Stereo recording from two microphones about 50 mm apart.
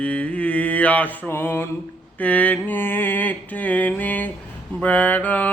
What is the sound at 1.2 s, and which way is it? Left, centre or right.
Mantra, left.